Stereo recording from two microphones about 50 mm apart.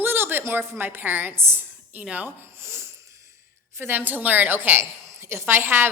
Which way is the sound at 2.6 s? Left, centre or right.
Right.